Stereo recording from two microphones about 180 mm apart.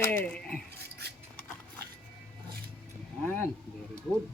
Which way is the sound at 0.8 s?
65° right (ahead or behind).